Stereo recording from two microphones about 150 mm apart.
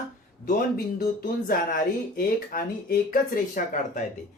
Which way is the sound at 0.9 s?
80° left.